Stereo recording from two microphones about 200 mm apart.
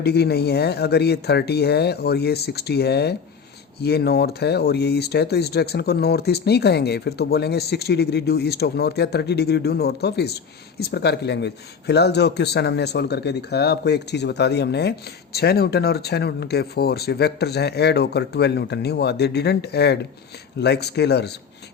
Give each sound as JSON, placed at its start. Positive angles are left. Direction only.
{"t": 0.0, "sound": "speech", "side_deg": 55}